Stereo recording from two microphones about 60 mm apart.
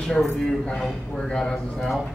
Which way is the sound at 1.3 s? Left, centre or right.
Centre.